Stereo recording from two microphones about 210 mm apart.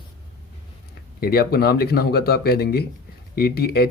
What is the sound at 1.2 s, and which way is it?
A man's voice, 45° left (ahead or behind).